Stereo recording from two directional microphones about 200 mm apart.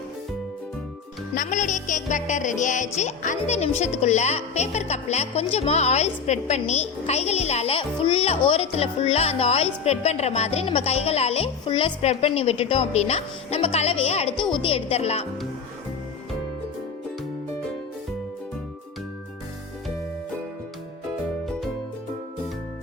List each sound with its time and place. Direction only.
1.4 s speech: 40° left (ahead or behind)